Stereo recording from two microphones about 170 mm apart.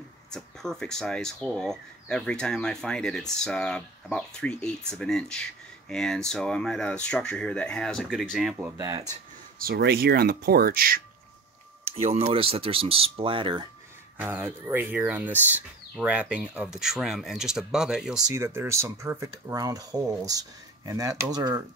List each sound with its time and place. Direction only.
0.3 s speech: 5° left (ahead or behind)
8.7 s speech: 20° right (ahead or behind)
9.6 s speech: 65° right (ahead or behind)
11.8 s a sound: 35° right (ahead or behind)
12.2 s speech: 35° right (ahead or behind)
14.1 s speech: 10° right (ahead or behind)
18.3 s speech: 15° right (ahead or behind)